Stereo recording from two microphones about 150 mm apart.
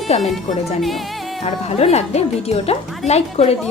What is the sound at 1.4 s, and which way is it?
A woman's voice, 45° left (ahead or behind).